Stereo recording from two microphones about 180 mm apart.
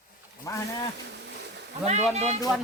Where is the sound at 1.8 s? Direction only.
35° right (ahead or behind).